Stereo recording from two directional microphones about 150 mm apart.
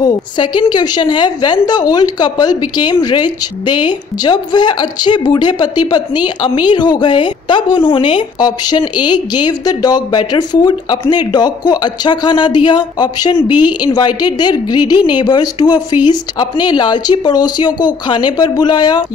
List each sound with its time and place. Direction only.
0.0 s a woman's voice: 30° left (ahead or behind)